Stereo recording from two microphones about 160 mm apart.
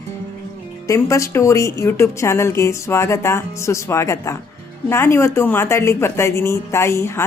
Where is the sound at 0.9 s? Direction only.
20° left (ahead or behind).